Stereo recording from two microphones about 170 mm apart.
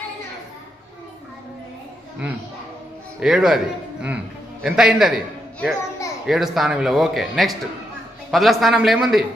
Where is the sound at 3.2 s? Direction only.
5° right (ahead or behind).